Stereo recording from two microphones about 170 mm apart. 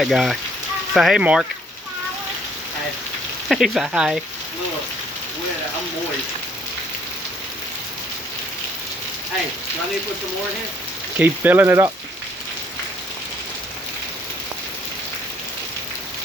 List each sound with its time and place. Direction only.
0.0 s speech: centre (ahead or behind)
3.5 s speech: centre (ahead or behind)
11.2 s speech: 10° right (ahead or behind)